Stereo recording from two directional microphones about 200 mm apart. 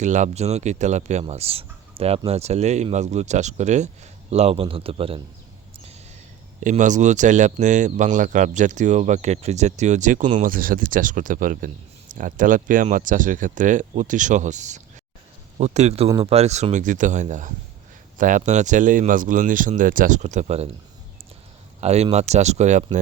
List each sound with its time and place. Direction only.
0.0 s a man's voice: 35° right (ahead or behind)
6.6 s speech: 40° right (ahead or behind)
21.8 s speech: 30° right (ahead or behind)